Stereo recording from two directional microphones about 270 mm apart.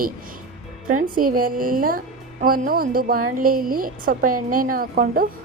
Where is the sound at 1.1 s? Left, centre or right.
Right.